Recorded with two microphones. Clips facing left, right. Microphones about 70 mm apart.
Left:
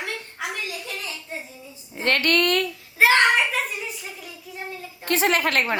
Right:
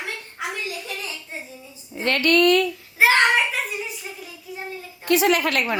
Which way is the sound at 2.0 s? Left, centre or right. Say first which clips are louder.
Right 3 dB; left.